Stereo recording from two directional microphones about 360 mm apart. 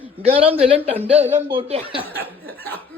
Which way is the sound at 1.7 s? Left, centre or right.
Centre.